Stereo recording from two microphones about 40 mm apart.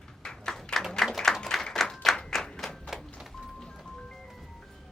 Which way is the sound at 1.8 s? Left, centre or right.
Centre.